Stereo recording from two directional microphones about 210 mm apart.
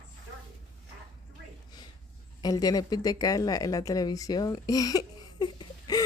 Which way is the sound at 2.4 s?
20° left (ahead or behind).